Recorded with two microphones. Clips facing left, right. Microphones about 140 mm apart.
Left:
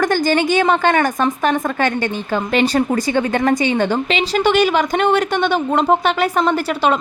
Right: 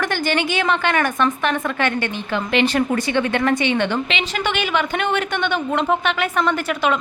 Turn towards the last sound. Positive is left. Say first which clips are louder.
# left 3 dB
turn(degrees=35)  # may be behind; listen again after turning